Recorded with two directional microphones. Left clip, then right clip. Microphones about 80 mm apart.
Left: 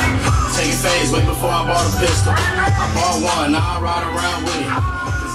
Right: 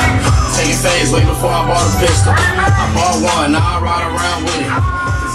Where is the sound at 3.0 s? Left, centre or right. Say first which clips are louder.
Right 4 dB; centre.